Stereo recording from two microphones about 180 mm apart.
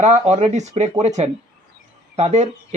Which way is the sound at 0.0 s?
40° right (ahead or behind).